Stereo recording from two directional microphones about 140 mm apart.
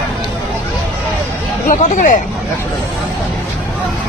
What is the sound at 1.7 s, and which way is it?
Speech, 70° left (ahead or behind).